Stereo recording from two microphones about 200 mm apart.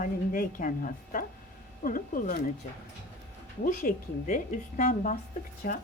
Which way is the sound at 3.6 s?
40° left (ahead or behind).